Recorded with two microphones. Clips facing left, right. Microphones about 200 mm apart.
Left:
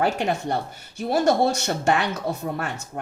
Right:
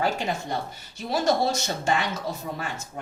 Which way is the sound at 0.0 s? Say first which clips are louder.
Left 4 dB; 60° left (ahead or behind).